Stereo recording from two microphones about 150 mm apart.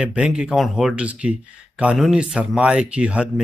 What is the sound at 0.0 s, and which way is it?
Speech, 5° right (ahead or behind).